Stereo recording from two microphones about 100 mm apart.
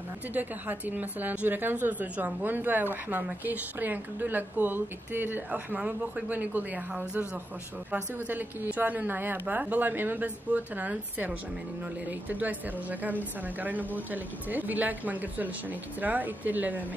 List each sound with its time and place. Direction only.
0.3 s a woman's voice: 15° right (ahead or behind)